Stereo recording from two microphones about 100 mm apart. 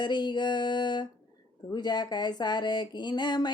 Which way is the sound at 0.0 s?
50° left (ahead or behind).